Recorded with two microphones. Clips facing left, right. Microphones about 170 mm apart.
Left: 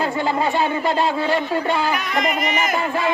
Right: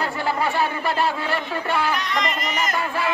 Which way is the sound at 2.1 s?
55° left (ahead or behind).